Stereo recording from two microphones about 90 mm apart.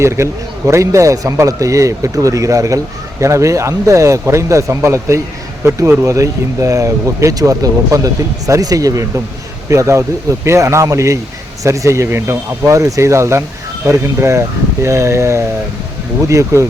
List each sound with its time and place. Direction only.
0.0 s a man's voice: 30° right (ahead or behind)